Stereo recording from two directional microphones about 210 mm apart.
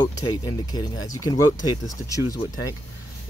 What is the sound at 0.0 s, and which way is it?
Speech, 20° left (ahead or behind).